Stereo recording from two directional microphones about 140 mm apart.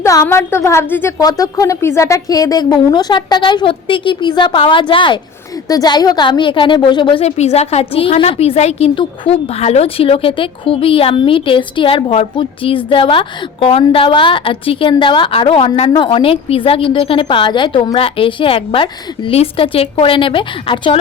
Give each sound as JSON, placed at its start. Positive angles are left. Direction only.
{"t": 0.0, "sound": "a woman's voice", "side_deg": 20}
{"t": 1.2, "sound": "a woman's voice", "side_deg": 25}